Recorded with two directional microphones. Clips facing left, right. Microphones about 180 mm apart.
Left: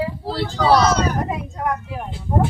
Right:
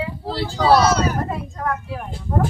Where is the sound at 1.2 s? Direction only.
15° left (ahead or behind).